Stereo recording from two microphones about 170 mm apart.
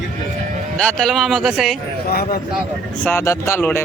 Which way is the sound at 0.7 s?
5° left (ahead or behind).